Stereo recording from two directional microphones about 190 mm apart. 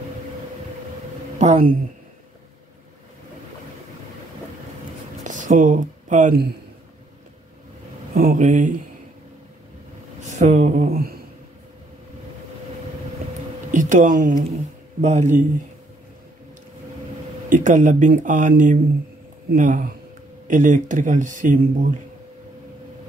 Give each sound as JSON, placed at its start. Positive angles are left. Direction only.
{"t": 1.4, "sound": "speech", "side_deg": -45}
{"t": 5.2, "sound": "speech", "side_deg": -45}
{"t": 8.1, "sound": "speech", "side_deg": -50}
{"t": 10.3, "sound": "speech", "side_deg": -40}
{"t": 13.7, "sound": "speech", "side_deg": -40}
{"t": 17.5, "sound": "speech", "side_deg": -40}